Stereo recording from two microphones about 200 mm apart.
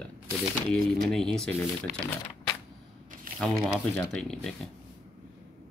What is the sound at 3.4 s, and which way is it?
Speech, centre (ahead or behind).